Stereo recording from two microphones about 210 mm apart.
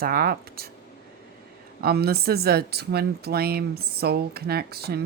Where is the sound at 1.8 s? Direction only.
50° right (ahead or behind).